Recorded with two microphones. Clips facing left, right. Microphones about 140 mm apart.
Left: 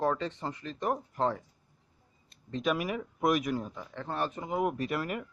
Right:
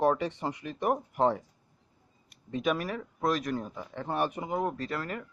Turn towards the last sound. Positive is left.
turn(degrees=15)  # may be behind; listen again after turning